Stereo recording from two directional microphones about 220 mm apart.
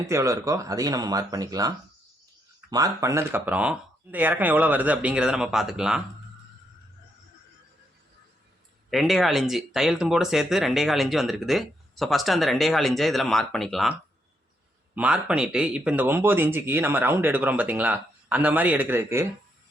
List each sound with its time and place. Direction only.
0.0 s speech: 15° right (ahead or behind)
8.9 s speech: centre (ahead or behind)
14.9 s speech: 5° right (ahead or behind)